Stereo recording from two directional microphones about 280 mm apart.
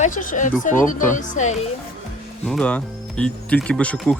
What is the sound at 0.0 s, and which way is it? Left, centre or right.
Speech, left.